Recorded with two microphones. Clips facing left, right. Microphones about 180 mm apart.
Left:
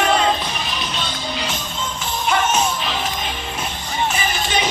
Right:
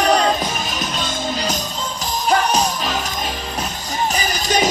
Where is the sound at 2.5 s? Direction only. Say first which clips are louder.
Right 1 dB; 35° right (ahead or behind).